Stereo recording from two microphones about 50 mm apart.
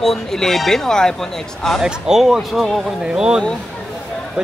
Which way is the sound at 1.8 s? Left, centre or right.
Centre.